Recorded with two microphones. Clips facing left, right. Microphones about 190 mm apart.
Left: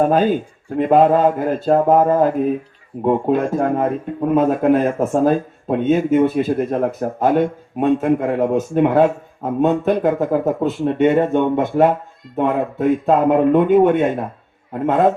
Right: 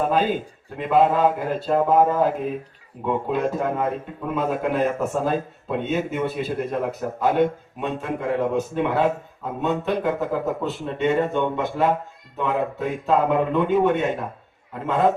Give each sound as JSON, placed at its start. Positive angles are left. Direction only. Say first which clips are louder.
{"t": 0.0, "sound": "speech", "louder": "left 6 dB", "side_deg": 50}